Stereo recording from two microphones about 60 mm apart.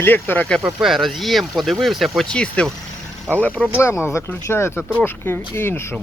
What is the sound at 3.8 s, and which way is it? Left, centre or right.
Speech, left.